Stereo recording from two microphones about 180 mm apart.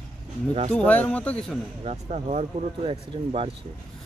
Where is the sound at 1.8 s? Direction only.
40° right (ahead or behind).